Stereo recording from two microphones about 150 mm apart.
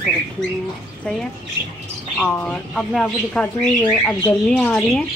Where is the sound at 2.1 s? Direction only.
10° left (ahead or behind).